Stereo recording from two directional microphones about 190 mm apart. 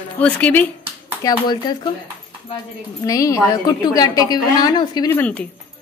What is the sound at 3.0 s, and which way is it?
A woman's voice, 15° left (ahead or behind).